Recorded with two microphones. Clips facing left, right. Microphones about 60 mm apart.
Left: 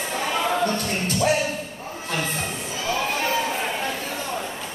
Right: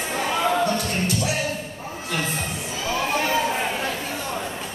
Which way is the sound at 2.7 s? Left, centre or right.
Centre.